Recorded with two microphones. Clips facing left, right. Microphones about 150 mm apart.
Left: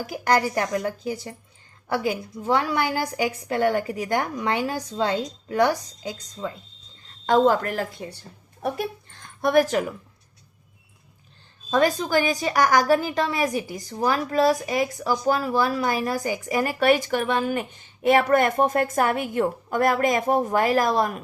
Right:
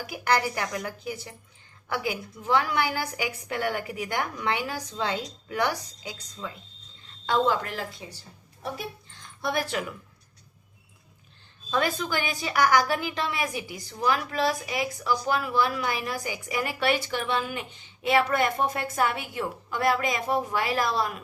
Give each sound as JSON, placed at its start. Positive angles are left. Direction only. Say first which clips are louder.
{"t": 0.1, "sound": "a woman's voice", "louder": "left 4 dB", "side_deg": 40}
{"t": 9.1, "sound": "music", "louder": "left 10 dB", "side_deg": 50}
{"t": 11.7, "sound": "a woman's voice", "louder": "left 6 dB", "side_deg": 40}